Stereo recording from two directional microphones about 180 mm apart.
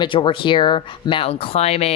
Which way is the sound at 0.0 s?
30° left (ahead or behind).